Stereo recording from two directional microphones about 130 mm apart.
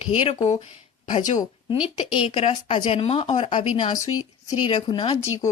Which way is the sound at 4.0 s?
25° left (ahead or behind).